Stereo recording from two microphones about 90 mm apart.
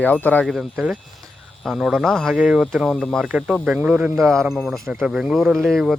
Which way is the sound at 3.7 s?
15° right (ahead or behind).